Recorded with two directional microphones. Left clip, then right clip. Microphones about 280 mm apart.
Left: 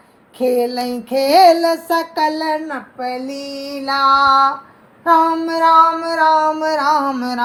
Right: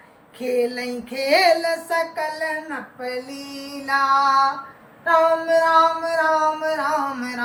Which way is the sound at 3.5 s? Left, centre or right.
Left.